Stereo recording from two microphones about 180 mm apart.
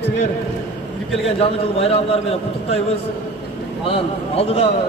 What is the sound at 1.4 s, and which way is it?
Speech, 35° left (ahead or behind).